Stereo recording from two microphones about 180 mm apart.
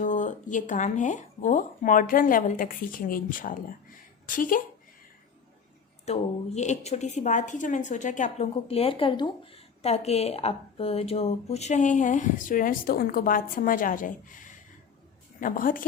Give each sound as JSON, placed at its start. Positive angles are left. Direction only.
{"t": 0.0, "sound": "speech", "side_deg": 45}
{"t": 6.1, "sound": "a woman's voice", "side_deg": 40}